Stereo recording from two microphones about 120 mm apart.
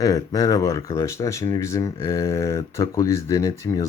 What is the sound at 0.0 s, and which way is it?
Speech, 30° left (ahead or behind).